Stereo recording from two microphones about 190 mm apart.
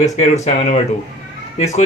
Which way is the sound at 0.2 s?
40° left (ahead or behind).